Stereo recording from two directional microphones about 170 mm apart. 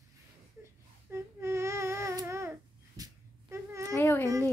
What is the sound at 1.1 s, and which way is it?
Babbling, 15° right (ahead or behind).